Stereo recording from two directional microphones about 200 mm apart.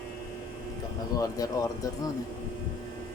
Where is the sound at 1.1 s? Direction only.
15° left (ahead or behind).